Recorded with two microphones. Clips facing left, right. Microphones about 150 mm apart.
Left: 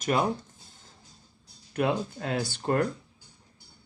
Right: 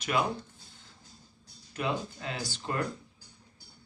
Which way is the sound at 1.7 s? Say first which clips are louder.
Left 6 dB; 55° left (ahead or behind).